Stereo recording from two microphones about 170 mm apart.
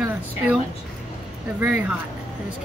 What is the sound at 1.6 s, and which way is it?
Speech, 10° right (ahead or behind).